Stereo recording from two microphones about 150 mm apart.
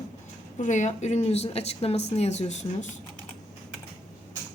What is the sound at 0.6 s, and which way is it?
Speech, 55° left (ahead or behind).